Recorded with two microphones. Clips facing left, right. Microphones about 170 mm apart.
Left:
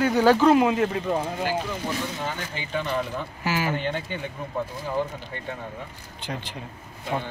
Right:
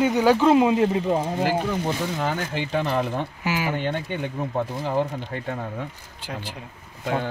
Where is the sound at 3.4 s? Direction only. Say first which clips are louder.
Left 1 dB; 15° right (ahead or behind).